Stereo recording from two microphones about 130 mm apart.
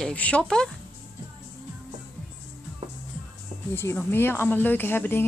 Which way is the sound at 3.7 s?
15° left (ahead or behind).